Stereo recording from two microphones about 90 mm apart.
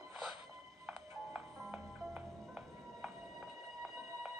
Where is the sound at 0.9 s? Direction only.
15° right (ahead or behind).